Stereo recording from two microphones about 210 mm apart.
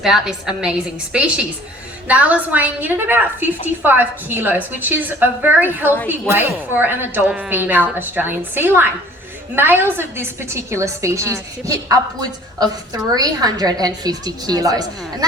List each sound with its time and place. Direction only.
0.0 s a woman's voice: centre (ahead or behind)
13.1 s a woman's voice: 20° right (ahead or behind)